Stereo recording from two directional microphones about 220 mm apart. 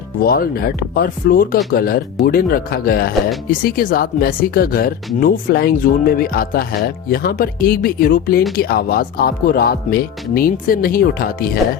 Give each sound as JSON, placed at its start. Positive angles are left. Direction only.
{"t": 0.2, "sound": "speech", "side_deg": 40}